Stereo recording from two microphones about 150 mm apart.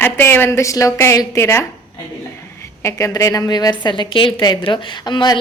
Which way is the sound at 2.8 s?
20° left (ahead or behind).